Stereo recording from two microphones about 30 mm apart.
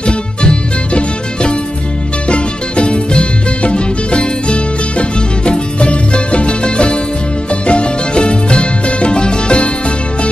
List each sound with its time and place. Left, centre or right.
0.0 s music: left